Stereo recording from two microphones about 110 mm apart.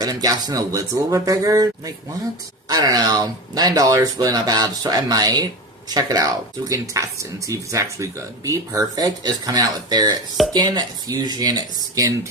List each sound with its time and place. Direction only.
0.0 s speech: 35° right (ahead or behind)